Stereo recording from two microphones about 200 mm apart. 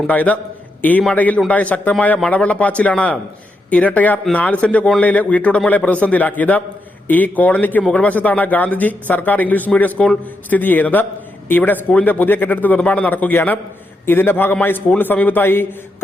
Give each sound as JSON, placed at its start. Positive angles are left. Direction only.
{"t": 0.1, "sound": "speech", "side_deg": 10}